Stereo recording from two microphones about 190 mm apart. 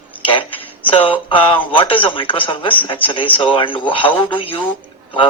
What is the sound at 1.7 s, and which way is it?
A man's voice, 25° left (ahead or behind).